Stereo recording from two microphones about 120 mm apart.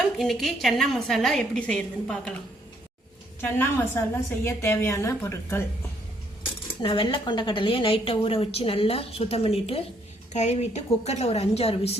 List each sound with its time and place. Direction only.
0.2 s a woman's voice: centre (ahead or behind)
3.4 s a woman's voice: 15° left (ahead or behind)
6.8 s a woman's voice: 45° left (ahead or behind)
10.3 s a woman's voice: 65° left (ahead or behind)